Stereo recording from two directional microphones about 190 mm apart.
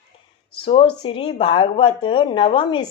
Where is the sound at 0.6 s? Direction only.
30° left (ahead or behind).